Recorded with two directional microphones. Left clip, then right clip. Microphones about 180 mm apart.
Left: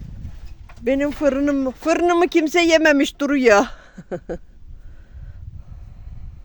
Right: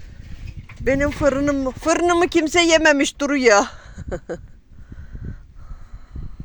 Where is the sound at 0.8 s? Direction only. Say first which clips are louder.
Right 1 dB; 35° left (ahead or behind).